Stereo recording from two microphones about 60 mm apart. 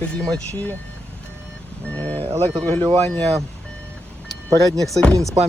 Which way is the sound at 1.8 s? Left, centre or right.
Left.